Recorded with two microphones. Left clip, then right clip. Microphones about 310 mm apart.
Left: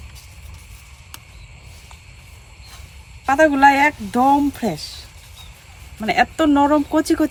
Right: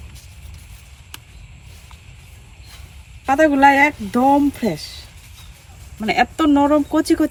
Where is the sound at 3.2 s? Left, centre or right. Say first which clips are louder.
Even; centre.